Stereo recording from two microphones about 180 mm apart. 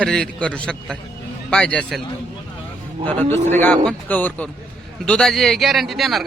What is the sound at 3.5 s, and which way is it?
A man's voice, 10° left (ahead or behind).